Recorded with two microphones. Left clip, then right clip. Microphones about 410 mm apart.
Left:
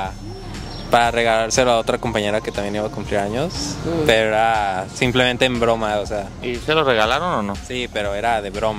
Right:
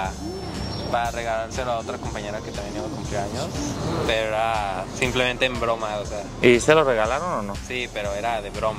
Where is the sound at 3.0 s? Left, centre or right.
Left.